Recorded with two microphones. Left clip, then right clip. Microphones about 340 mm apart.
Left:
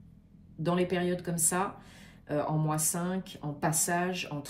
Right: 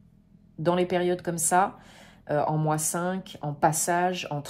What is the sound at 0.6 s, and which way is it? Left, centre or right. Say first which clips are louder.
Speech: right 6 dB; right.